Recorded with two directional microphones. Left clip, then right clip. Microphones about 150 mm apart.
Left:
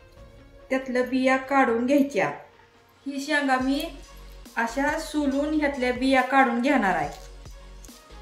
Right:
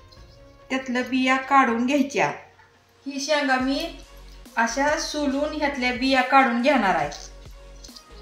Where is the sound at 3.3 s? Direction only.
25° right (ahead or behind).